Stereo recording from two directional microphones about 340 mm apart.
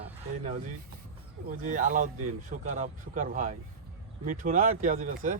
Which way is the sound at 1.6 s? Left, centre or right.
Right.